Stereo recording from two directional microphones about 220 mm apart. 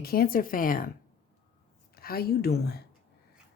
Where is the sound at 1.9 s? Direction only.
45° left (ahead or behind).